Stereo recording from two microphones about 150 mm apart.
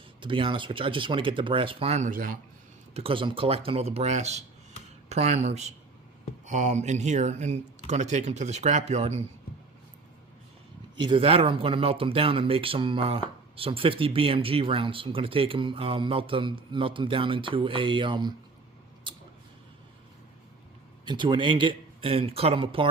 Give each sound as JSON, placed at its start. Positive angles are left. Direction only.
{"t": 0.2, "sound": "speech", "side_deg": -35}
{"t": 2.0, "sound": "a man's voice", "side_deg": -65}
{"t": 2.9, "sound": "speech", "side_deg": -40}
{"t": 10.9, "sound": "speech", "side_deg": -35}
{"t": 19.1, "sound": "a sound", "side_deg": -30}
{"t": 21.0, "sound": "speech", "side_deg": -30}